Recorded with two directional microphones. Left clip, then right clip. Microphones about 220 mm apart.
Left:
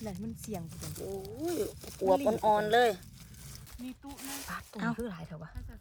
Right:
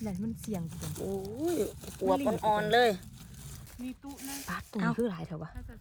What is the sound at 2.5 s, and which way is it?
Speech, 15° left (ahead or behind).